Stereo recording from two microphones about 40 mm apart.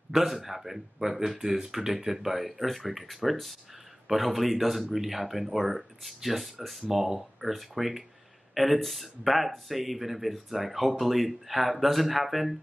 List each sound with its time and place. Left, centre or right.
0.1 s speech: centre
1.3 s speech: right
1.6 s speech: centre